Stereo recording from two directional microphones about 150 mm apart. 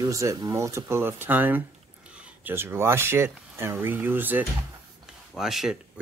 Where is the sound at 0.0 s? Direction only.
20° right (ahead or behind).